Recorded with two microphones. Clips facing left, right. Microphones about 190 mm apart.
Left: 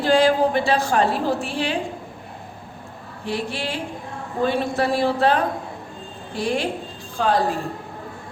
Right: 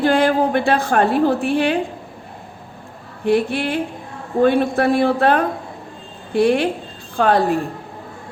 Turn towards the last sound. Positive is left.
turn(degrees=-60)  # may be behind; listen again after turning